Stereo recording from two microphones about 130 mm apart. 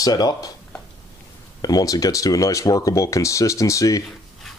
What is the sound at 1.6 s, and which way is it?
Speech, 30° left (ahead or behind).